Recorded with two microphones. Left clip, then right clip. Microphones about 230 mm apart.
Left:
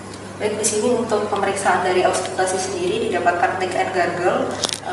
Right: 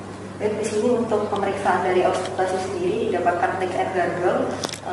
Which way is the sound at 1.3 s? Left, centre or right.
Centre.